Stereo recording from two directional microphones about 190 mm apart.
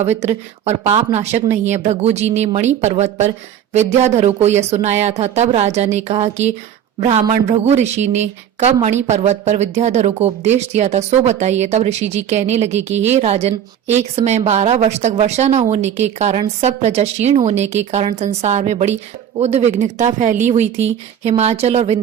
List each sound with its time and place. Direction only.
0.0 s speech: 35° right (ahead or behind)